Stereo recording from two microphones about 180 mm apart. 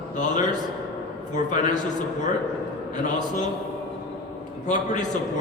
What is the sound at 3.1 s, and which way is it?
Speech, 45° left (ahead or behind).